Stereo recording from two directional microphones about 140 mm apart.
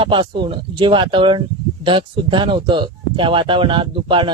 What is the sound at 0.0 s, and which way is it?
Speech, 35° right (ahead or behind).